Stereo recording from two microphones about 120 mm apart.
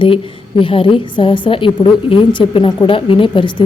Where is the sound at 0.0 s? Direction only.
45° left (ahead or behind).